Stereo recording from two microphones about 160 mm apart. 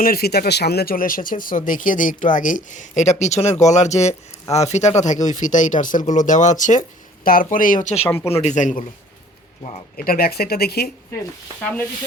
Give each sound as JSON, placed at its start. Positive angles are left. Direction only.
{"t": 0.0, "sound": "speech", "side_deg": 70}
{"t": 8.0, "sound": "speech", "side_deg": 15}
{"t": 8.4, "sound": "speech", "side_deg": 50}
{"t": 10.0, "sound": "speech", "side_deg": 70}